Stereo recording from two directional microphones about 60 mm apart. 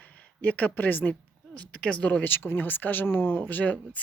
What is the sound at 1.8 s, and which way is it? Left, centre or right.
Speech, left.